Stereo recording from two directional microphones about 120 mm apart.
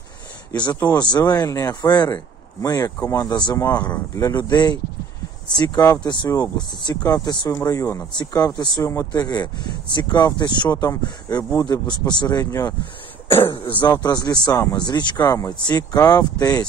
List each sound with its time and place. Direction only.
0.8 s speech: 35° left (ahead or behind)
6.0 s speech: 35° left (ahead or behind)
13.4 s speech: 45° left (ahead or behind)